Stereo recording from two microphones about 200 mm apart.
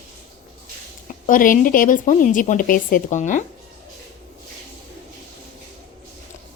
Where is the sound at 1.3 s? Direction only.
40° left (ahead or behind).